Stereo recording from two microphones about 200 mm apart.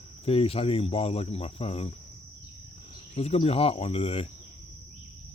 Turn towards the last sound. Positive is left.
turn(degrees=30)  # may be behind; listen again after turning